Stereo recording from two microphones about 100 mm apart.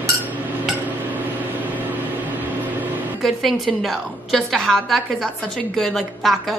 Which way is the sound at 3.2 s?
Centre (ahead or behind).